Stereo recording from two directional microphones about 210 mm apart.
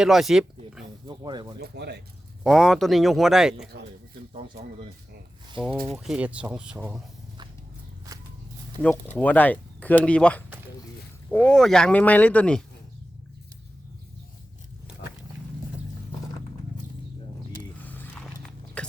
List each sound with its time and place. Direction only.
0.0 s speech: centre (ahead or behind)
1.0 s speech: 20° right (ahead or behind)
1.6 s speech: 50° right (ahead or behind)
2.4 s speech: centre (ahead or behind)
5.8 s speech: centre (ahead or behind)
8.8 s speech: 5° left (ahead or behind)
17.8 s walk: 5° left (ahead or behind)